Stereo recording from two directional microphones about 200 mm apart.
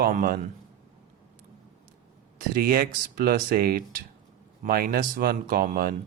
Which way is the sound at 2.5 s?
45° right (ahead or behind).